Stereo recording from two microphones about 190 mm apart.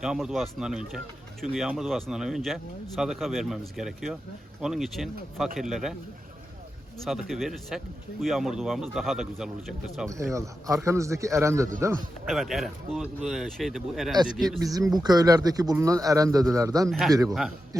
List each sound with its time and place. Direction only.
0.0 s speech: centre (ahead or behind)
7.0 s speech: centre (ahead or behind)
10.3 s a man's voice: 15° right (ahead or behind)
12.2 s speech: centre (ahead or behind)
14.6 s a man's voice: 20° right (ahead or behind)
16.9 s speech: centre (ahead or behind)